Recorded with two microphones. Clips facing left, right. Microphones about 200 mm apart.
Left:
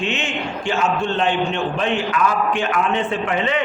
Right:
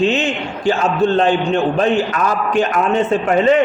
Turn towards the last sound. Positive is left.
turn(degrees=-45)  # may be behind; listen again after turning